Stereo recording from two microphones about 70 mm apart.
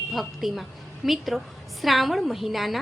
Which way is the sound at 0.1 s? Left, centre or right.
Centre.